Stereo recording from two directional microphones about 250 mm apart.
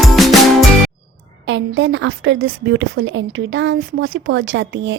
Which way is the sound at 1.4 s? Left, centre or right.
Right.